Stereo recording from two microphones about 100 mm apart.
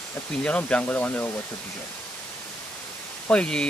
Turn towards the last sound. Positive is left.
turn(degrees=10)  # may be behind; listen again after turning